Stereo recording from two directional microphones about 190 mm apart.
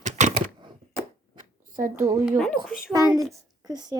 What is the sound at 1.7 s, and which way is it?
Speech, 45° right (ahead or behind).